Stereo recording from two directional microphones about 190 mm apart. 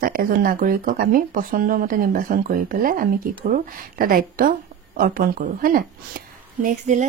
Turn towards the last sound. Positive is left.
turn(degrees=-40)  # may be behind; listen again after turning